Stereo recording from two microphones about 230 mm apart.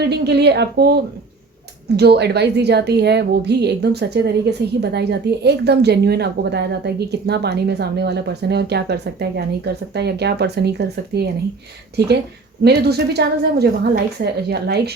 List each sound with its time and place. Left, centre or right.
0.0 s a woman's voice: right
2.0 s a woman's voice: right